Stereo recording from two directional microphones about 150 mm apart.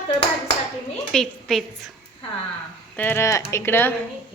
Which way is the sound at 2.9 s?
15° left (ahead or behind).